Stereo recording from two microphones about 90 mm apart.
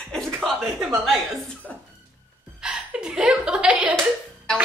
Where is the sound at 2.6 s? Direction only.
10° right (ahead or behind).